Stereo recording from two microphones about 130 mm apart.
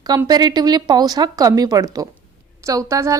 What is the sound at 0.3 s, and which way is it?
A woman's voice, 30° right (ahead or behind).